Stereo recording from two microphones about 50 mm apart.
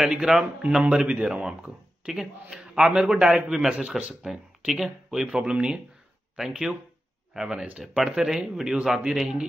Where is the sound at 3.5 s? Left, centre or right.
Centre.